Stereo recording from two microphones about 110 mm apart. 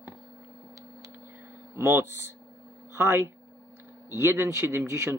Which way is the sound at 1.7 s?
25° right (ahead or behind).